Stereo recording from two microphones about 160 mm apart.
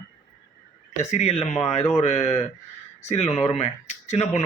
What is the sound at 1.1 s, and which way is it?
Speech, 40° left (ahead or behind).